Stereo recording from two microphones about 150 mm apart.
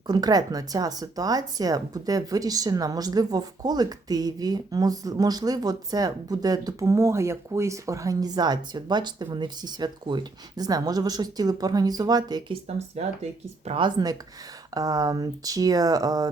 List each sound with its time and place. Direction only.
0.1 s speech: 25° right (ahead or behind)
13.0 s speech: 45° right (ahead or behind)
13.7 s speech: 35° right (ahead or behind)